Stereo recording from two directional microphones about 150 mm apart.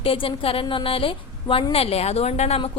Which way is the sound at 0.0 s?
35° left (ahead or behind).